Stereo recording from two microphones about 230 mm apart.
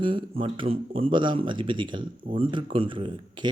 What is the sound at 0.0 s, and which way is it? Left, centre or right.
Speech, right.